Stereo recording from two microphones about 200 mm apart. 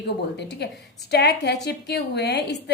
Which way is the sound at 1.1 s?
55° left (ahead or behind).